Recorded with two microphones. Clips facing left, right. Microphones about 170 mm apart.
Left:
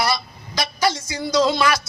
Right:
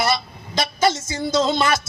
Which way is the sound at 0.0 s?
25° right (ahead or behind).